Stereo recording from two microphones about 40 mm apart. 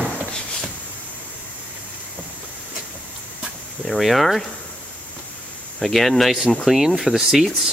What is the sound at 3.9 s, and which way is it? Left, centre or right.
Speech, centre.